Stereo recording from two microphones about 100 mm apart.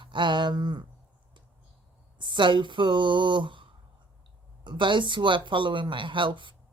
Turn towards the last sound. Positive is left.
turn(degrees=-55)  # may be behind; listen again after turning